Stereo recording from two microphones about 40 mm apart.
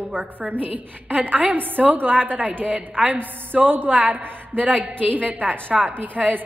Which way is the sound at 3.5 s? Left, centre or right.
Right.